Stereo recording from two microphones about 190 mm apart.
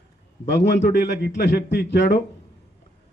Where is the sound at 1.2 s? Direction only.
65° left (ahead or behind).